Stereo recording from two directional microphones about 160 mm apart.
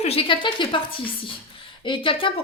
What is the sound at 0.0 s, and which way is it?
A woman's voice, 35° left (ahead or behind).